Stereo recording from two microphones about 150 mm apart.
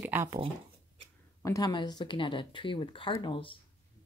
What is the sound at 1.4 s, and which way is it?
Speech, 20° left (ahead or behind).